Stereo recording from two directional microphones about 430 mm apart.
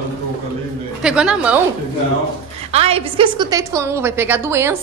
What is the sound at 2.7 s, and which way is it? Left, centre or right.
A woman's voice, centre.